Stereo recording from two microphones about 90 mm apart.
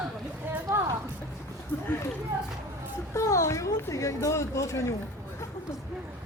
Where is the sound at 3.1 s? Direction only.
35° left (ahead or behind).